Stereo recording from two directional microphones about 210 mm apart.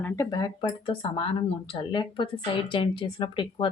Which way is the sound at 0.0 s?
15° left (ahead or behind).